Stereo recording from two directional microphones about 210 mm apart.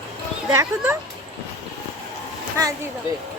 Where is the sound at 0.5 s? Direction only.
15° right (ahead or behind).